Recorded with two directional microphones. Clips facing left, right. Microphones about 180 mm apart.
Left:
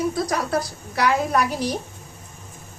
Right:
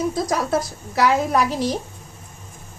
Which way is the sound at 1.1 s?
25° right (ahead or behind).